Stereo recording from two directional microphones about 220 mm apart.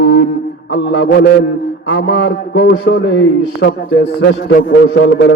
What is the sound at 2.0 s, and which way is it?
A man's voice, 45° left (ahead or behind).